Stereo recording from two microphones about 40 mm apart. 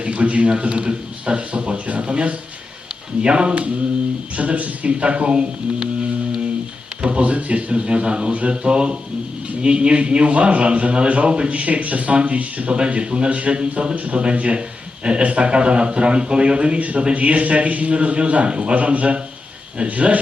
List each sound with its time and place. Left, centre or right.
0.0 s speech: right
7.0 s speech: right